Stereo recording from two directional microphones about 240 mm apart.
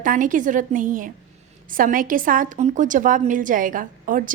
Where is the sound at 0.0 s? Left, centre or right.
Right.